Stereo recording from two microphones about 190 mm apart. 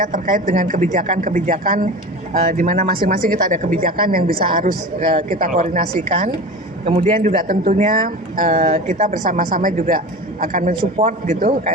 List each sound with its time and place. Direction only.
0.0 s speech: 45° right (ahead or behind)